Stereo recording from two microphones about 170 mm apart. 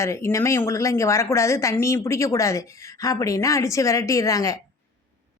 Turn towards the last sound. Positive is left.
turn(degrees=20)  # may be behind; listen again after turning